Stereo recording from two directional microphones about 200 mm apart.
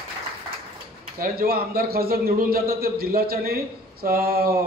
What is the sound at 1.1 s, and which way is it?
A man's voice, 50° right (ahead or behind).